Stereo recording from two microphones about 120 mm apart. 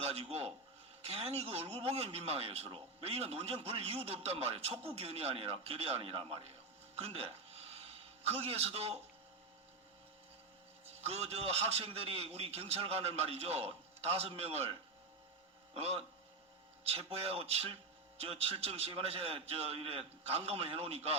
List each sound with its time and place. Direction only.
0.0 s a man's voice: 55° right (ahead or behind)
10.8 s a man's voice: 60° right (ahead or behind)